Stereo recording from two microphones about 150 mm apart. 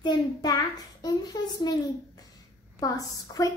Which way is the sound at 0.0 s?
30° left (ahead or behind).